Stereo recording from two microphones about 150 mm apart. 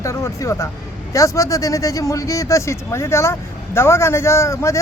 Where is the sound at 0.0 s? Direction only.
20° left (ahead or behind).